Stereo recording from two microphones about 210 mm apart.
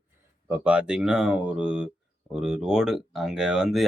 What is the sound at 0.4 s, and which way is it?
Speech, 5° right (ahead or behind).